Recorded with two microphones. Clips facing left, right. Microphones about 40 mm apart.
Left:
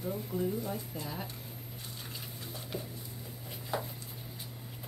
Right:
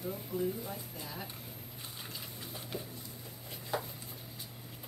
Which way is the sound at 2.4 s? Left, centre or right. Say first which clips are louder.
Left 2 dB; centre.